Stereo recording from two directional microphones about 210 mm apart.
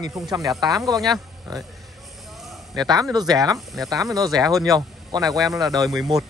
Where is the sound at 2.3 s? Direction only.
Centre (ahead or behind).